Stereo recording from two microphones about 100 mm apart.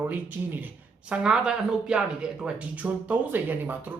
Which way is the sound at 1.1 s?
10° right (ahead or behind).